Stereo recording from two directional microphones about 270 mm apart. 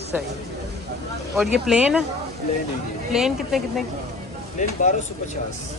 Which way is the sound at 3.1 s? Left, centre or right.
Centre.